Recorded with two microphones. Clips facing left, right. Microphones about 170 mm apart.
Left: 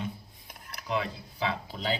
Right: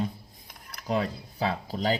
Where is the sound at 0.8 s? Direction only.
40° right (ahead or behind).